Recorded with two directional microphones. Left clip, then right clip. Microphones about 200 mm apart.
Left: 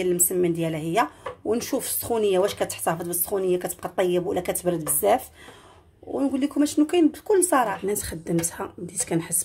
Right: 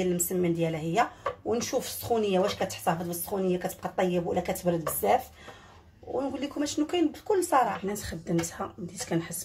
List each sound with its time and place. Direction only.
0.0 s speech: 35° left (ahead or behind)
6.3 s speech: 40° left (ahead or behind)